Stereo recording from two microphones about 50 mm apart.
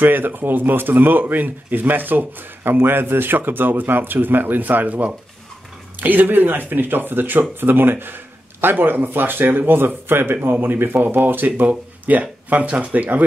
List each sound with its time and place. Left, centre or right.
0.0 s speech: right